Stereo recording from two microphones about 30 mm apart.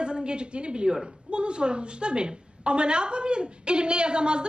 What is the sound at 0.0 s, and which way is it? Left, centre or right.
A woman's voice, right.